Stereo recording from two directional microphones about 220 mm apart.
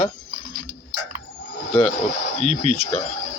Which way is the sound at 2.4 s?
30° left (ahead or behind).